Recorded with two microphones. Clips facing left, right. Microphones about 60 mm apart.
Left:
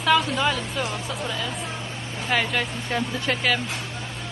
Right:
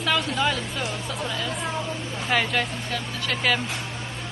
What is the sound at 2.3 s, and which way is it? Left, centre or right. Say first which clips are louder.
Speech: even; centre.